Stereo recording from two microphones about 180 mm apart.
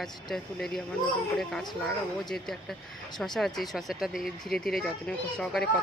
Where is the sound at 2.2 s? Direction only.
Centre (ahead or behind).